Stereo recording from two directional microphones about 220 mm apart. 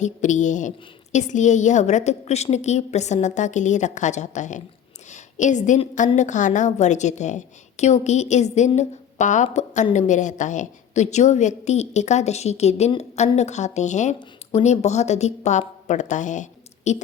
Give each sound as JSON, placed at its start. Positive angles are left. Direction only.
{"t": 0.0, "sound": "a woman's voice", "side_deg": 35}